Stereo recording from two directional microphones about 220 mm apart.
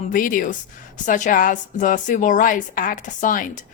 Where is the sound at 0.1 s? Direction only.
40° left (ahead or behind).